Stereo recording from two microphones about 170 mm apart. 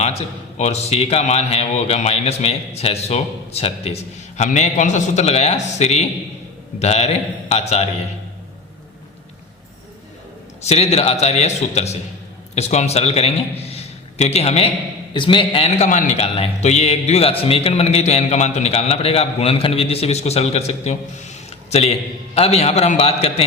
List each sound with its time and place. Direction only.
0.0 s a man's voice: 40° left (ahead or behind)
10.6 s a man's voice: 40° left (ahead or behind)